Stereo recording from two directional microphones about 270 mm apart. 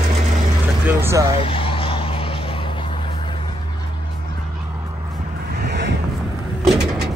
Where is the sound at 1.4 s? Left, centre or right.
Centre.